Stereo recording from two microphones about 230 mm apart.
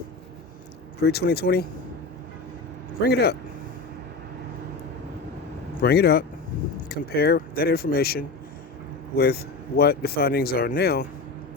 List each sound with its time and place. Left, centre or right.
1.0 s speech: left
3.0 s speech: left
5.8 s speech: left